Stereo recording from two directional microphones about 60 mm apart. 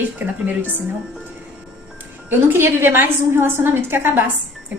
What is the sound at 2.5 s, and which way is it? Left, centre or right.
Speech, right.